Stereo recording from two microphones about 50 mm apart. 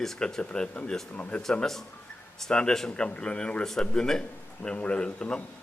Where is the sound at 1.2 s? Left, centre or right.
Left.